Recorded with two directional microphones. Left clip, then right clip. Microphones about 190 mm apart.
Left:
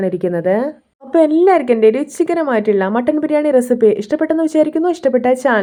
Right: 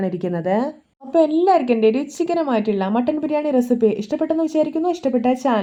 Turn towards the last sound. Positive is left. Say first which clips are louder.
# left 6 dB
turn(degrees=25)  # may be behind; listen again after turning